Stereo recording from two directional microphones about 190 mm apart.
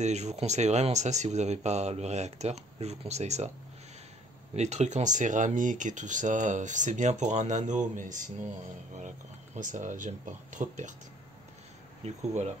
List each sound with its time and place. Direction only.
0.0 s speech: 35° right (ahead or behind)
4.6 s speech: 35° right (ahead or behind)
9.6 s speech: 40° right (ahead or behind)
12.0 s speech: 35° right (ahead or behind)